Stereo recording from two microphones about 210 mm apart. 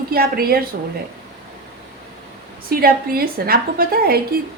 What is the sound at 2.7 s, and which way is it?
A woman's voice, 45° right (ahead or behind).